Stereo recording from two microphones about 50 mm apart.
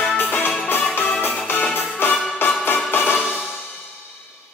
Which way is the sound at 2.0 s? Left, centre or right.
Left.